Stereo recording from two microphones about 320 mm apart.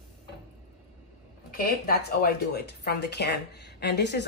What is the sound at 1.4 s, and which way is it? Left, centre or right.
Speech, left.